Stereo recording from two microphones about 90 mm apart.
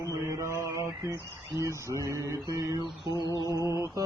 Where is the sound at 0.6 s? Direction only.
35° right (ahead or behind).